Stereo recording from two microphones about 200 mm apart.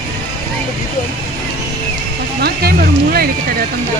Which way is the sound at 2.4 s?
50° right (ahead or behind).